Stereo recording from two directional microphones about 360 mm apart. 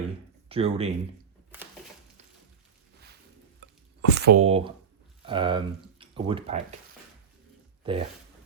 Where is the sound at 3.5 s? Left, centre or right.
Right.